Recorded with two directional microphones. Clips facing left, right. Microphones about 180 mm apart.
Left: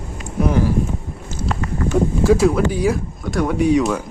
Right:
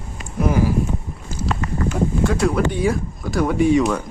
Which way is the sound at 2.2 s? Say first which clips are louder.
Left 5 dB; 5° left (ahead or behind).